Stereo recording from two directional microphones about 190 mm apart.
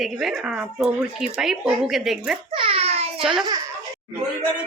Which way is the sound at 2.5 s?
30° right (ahead or behind).